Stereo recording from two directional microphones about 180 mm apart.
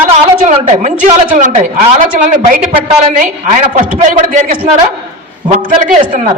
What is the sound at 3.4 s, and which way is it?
A woman's voice, 40° right (ahead or behind).